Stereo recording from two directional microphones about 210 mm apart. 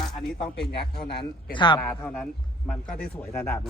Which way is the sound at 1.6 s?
20° left (ahead or behind).